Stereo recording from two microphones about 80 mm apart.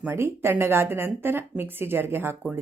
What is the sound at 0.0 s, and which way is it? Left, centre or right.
A woman's voice, right.